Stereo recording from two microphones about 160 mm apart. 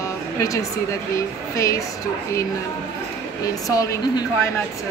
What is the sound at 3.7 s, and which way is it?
Speech, 20° left (ahead or behind).